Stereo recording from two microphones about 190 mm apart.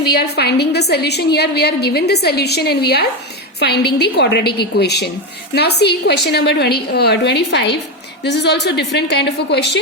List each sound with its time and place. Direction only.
0.2 s a woman's voice: 60° left (ahead or behind)